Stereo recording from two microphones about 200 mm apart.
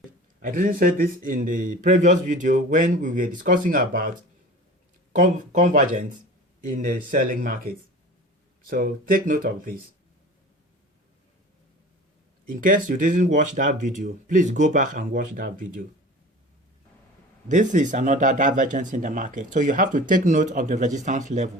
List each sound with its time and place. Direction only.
0.4 s speech: 40° right (ahead or behind)
5.1 s speech: 40° right (ahead or behind)
8.7 s speech: 45° right (ahead or behind)
12.5 s speech: 40° right (ahead or behind)
17.5 s speech: 40° right (ahead or behind)